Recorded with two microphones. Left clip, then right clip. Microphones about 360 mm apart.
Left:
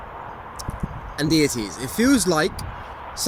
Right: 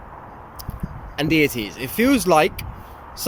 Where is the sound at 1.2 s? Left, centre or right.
Centre.